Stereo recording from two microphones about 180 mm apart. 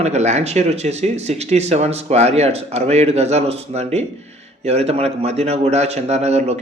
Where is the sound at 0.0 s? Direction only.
40° right (ahead or behind).